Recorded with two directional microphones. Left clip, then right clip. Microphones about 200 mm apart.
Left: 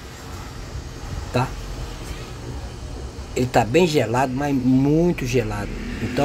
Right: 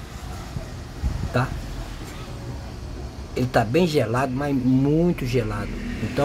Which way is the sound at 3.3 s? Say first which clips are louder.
Left 3 dB; 5° left (ahead or behind).